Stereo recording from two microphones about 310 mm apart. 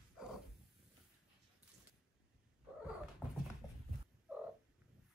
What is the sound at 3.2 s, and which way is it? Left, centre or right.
Dog, centre.